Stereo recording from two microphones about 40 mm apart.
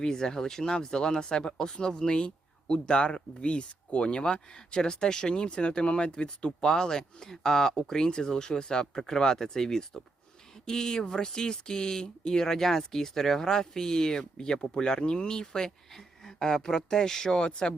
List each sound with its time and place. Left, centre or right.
0.0 s speech: centre